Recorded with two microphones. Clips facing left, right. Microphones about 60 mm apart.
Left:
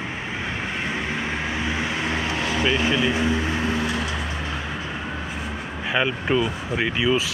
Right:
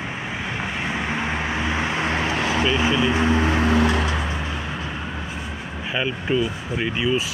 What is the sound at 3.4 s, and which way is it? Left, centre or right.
Vehicle, right.